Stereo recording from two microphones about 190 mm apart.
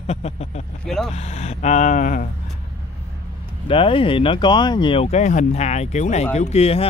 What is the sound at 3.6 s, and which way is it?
Speech, 30° left (ahead or behind).